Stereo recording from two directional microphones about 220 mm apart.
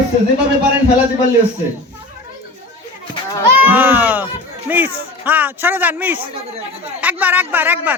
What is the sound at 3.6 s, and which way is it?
Speech, 10° right (ahead or behind).